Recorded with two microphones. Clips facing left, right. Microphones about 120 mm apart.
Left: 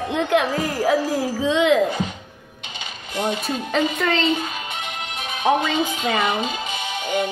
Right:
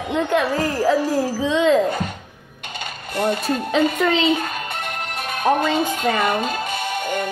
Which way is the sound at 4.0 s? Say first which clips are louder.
Right 2 dB; centre (ahead or behind).